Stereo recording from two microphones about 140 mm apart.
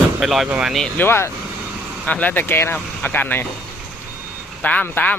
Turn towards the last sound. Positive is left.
turn(degrees=10)  # may be behind; listen again after turning